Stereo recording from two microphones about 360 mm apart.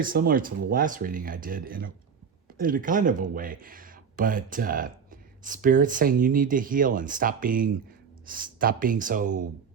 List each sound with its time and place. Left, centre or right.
0.1 s speech: right